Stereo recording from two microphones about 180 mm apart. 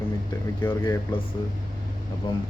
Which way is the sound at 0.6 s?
10° left (ahead or behind).